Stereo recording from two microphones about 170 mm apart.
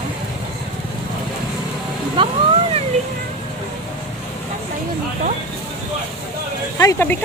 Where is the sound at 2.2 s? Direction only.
30° right (ahead or behind).